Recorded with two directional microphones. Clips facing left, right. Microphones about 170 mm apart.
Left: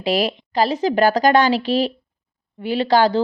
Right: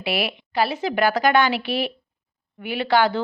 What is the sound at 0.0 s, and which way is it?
A woman's voice, 40° left (ahead or behind).